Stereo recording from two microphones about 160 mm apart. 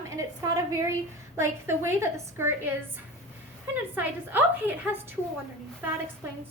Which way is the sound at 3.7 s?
10° right (ahead or behind).